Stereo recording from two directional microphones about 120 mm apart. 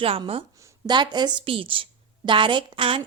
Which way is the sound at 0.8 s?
35° right (ahead or behind).